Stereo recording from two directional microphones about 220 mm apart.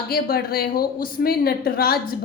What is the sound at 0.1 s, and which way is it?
A woman's voice, 45° left (ahead or behind).